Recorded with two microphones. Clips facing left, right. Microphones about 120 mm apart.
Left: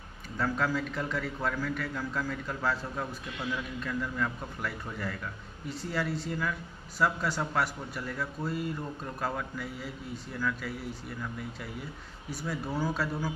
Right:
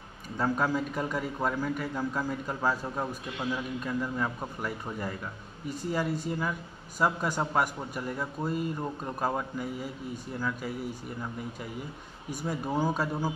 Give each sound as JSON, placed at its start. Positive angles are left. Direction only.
{"t": 0.4, "sound": "a man's voice", "side_deg": -15}
{"t": 12.8, "sound": "a man's voice", "side_deg": -15}